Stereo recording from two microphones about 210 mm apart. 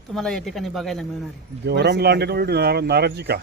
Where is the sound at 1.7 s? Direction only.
50° right (ahead or behind).